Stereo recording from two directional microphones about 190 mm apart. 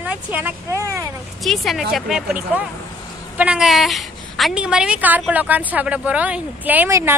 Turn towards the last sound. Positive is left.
turn(degrees=-10)  # may be behind; listen again after turning